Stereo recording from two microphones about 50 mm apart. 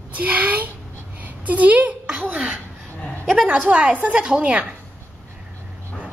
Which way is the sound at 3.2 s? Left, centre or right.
Centre.